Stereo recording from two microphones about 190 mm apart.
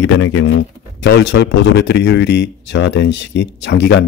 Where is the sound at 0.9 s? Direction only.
65° left (ahead or behind).